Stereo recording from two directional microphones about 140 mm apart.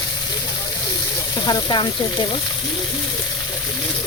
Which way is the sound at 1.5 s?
35° left (ahead or behind).